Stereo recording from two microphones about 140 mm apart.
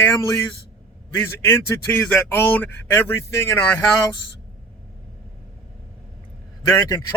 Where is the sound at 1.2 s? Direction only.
20° left (ahead or behind).